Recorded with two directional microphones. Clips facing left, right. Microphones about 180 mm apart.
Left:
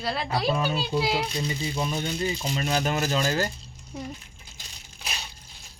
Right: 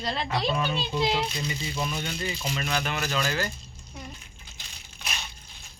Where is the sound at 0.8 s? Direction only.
10° left (ahead or behind).